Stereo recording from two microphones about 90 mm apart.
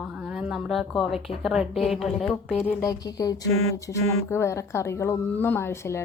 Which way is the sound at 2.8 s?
45° left (ahead or behind).